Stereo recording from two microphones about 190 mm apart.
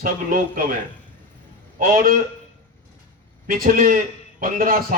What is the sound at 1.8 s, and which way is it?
Speech, 45° right (ahead or behind).